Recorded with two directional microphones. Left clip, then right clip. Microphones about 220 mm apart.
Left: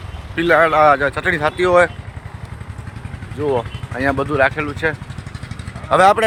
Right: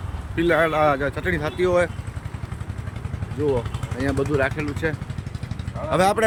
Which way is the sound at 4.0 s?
5° right (ahead or behind).